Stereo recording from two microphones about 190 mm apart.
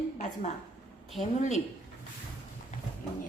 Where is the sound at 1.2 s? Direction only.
35° left (ahead or behind).